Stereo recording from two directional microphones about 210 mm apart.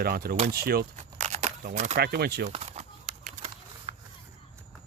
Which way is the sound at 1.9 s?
50° right (ahead or behind).